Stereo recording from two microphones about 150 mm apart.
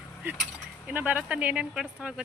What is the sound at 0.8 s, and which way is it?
Speech, 10° right (ahead or behind).